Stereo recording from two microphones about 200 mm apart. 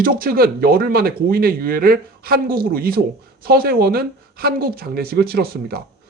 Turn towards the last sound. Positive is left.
turn(degrees=-50)  # may be behind; listen again after turning